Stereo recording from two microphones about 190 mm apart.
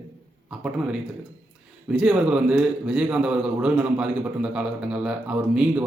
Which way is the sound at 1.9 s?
5° right (ahead or behind).